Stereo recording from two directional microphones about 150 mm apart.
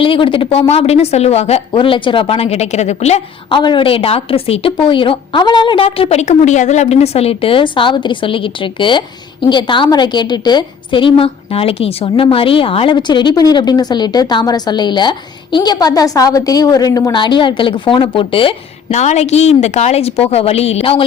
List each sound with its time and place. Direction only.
0.0 s a woman's voice: 35° left (ahead or behind)
1.7 s a woman's voice: 35° left (ahead or behind)
3.6 s a woman's voice: 30° left (ahead or behind)